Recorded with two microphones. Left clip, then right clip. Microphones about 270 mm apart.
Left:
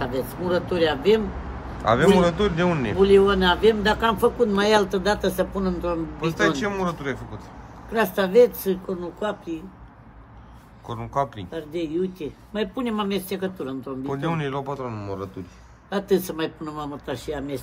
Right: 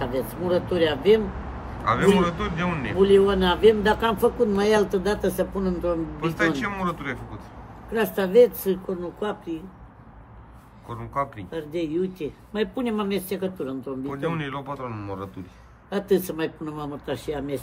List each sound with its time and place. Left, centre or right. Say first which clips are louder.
0.0 s speech: even; centre
1.9 s a man's voice: left 3 dB; centre
3.0 s a man's voice: left 1 dB; centre
11.5 s speech: right 2 dB; centre
14.1 s a man's voice: left 3 dB; centre